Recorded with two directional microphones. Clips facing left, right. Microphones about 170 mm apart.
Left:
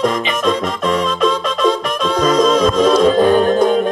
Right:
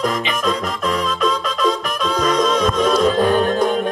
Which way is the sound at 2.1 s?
25° left (ahead or behind).